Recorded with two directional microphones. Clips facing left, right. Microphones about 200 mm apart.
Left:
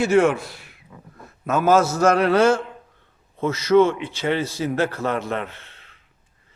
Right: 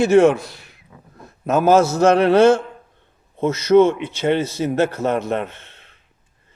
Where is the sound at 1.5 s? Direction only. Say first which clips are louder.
Right 3 dB; 35° right (ahead or behind).